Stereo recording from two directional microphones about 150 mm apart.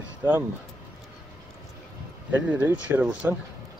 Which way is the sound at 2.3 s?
10° right (ahead or behind).